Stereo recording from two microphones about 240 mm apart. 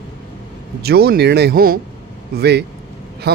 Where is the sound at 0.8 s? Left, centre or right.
Right.